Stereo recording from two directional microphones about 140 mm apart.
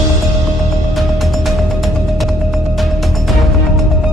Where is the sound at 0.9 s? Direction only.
Centre (ahead or behind).